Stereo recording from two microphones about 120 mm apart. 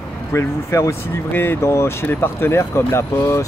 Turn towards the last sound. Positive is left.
turn(degrees=20)  # may be behind; listen again after turning